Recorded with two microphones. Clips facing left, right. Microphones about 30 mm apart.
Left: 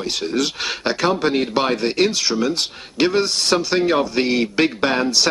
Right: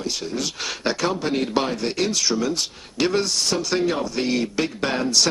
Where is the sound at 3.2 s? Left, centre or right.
Left.